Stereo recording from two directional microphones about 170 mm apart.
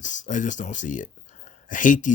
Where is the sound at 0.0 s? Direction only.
50° left (ahead or behind).